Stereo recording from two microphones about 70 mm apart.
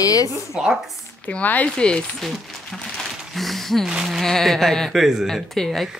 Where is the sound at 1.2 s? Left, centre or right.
Left.